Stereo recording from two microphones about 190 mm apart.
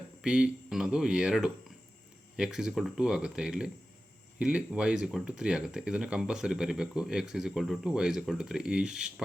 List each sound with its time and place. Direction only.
0.2 s speech: 5° right (ahead or behind)